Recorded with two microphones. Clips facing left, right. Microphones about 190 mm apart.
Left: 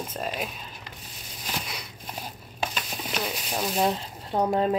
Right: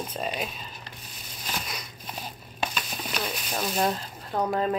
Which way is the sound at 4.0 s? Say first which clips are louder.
Left 2 dB; 25° left (ahead or behind).